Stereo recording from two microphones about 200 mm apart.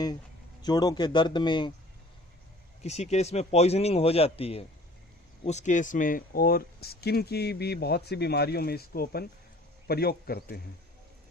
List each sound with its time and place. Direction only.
0.6 s speech: 20° left (ahead or behind)
2.8 s a man's voice: 35° left (ahead or behind); by 10.4 s 50° left (ahead or behind)